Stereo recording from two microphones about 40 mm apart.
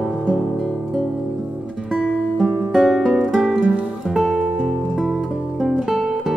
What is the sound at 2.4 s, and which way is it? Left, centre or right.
Music, centre.